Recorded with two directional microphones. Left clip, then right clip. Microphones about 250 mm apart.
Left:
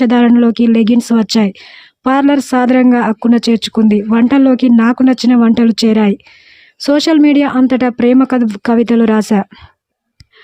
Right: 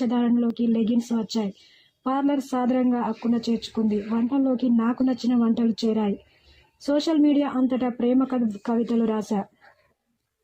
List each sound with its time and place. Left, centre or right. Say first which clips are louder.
0.0 s speech: left 14 dB; left